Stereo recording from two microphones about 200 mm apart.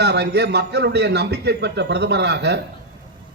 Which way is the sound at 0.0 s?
55° right (ahead or behind).